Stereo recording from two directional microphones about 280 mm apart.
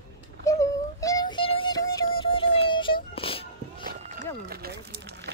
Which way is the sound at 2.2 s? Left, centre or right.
Centre.